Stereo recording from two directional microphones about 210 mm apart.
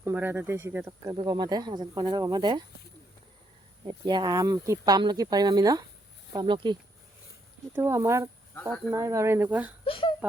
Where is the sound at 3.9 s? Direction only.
20° right (ahead or behind).